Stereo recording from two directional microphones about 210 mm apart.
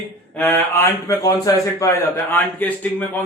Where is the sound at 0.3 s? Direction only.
10° left (ahead or behind).